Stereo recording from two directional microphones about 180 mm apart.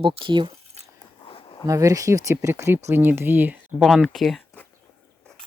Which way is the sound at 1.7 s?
20° right (ahead or behind).